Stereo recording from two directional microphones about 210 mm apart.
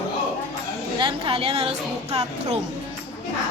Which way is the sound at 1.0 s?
25° right (ahead or behind).